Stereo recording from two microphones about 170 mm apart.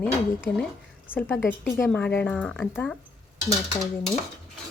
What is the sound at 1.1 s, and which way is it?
Speech, 10° left (ahead or behind).